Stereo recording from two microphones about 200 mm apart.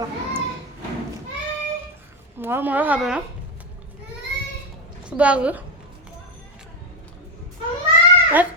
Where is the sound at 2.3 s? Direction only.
10° right (ahead or behind).